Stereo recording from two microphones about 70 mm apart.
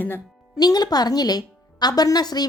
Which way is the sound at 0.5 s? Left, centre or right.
Left.